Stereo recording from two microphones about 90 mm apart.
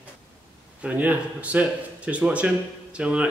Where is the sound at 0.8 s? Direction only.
20° right (ahead or behind).